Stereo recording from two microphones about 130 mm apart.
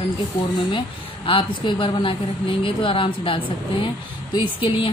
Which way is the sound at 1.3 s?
40° left (ahead or behind).